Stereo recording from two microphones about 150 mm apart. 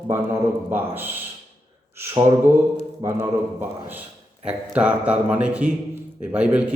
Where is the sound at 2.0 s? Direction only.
20° right (ahead or behind).